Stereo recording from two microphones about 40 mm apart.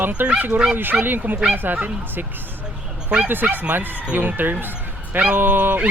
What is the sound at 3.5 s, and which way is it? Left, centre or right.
Speech, right.